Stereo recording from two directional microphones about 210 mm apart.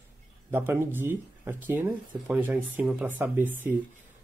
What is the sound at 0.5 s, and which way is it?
Speech, 10° right (ahead or behind).